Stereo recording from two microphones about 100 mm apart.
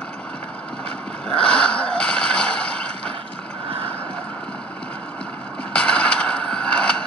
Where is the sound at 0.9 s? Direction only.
10° left (ahead or behind).